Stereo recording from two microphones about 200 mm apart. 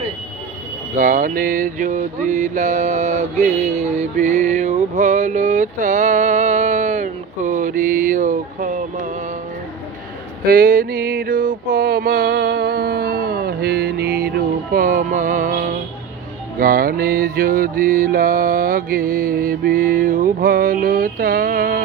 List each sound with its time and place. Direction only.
0.9 s mantra: 40° right (ahead or behind)
10.4 s a sound: 45° right (ahead or behind)
16.6 s mantra: 45° right (ahead or behind)